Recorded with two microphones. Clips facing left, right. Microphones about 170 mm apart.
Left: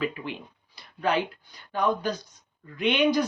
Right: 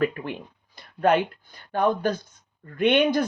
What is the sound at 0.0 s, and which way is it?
Speech, 50° right (ahead or behind).